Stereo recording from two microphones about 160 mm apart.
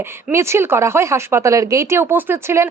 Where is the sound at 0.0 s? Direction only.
15° right (ahead or behind).